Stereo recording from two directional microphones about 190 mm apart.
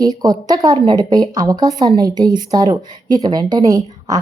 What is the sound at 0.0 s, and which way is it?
A woman's voice, 20° right (ahead or behind).